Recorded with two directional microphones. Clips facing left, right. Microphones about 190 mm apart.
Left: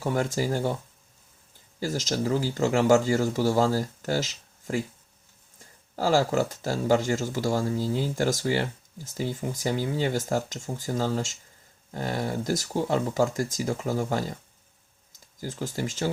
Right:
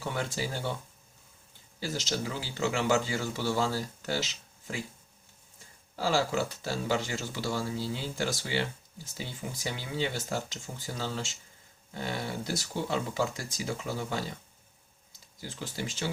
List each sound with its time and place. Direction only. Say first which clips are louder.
0.0 s speech: left 7 dB; 45° left (ahead or behind)
1.8 s speech: left 6 dB; 45° left (ahead or behind)
6.0 s speech: left 5 dB; 45° left (ahead or behind)
15.4 s speech: left 6 dB; 45° left (ahead or behind)